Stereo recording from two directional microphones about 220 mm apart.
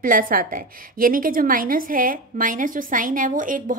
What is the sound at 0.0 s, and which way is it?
A woman's voice, 40° right (ahead or behind).